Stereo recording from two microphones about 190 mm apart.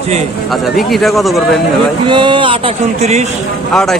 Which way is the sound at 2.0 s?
25° right (ahead or behind).